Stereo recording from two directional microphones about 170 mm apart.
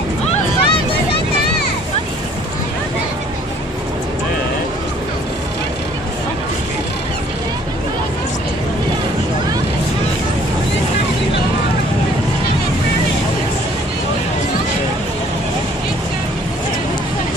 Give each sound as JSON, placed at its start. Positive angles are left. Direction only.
{"t": 0.3, "sound": "vehicle", "side_deg": 30}